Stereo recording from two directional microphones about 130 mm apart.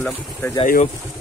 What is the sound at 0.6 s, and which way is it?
Speech, 90° left.